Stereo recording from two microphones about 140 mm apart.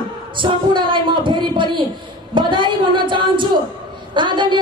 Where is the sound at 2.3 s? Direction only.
35° right (ahead or behind).